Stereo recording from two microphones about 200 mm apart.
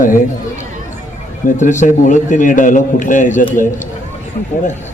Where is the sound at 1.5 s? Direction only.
35° left (ahead or behind).